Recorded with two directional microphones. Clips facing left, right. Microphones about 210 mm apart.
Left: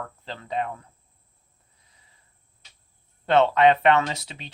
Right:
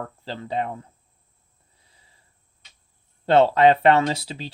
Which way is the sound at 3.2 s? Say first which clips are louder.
Right 2 dB; 30° right (ahead or behind).